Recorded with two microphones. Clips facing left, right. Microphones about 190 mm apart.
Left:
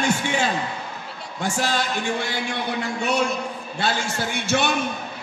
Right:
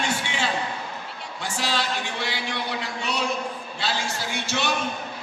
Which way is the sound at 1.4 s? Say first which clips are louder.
Left 4 dB; 45° left (ahead or behind).